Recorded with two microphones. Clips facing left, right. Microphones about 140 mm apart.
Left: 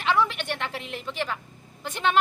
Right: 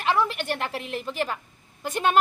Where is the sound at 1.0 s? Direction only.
40° right (ahead or behind).